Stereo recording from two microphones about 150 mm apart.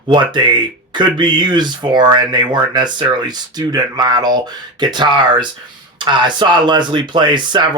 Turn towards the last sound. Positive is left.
turn(degrees=-30)  # may be behind; listen again after turning